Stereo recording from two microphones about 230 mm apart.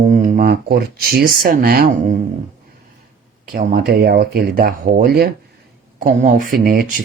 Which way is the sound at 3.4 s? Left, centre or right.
Right.